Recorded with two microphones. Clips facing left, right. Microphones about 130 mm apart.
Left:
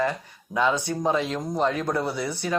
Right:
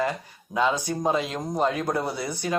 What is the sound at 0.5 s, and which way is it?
Speech, 15° right (ahead or behind).